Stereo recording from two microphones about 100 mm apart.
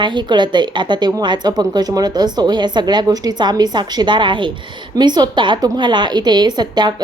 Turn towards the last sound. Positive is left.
turn(degrees=-45)  # may be behind; listen again after turning